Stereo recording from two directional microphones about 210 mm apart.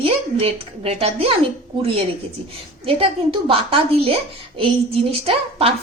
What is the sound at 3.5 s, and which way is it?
A woman's voice, 25° right (ahead or behind).